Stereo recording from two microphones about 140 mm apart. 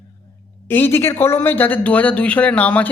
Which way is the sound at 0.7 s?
15° left (ahead or behind).